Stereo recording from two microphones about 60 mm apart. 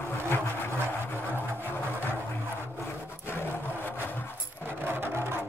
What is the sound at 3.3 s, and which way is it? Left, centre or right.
Roar, left.